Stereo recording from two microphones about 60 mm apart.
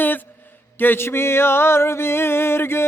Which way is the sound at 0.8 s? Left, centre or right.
Left.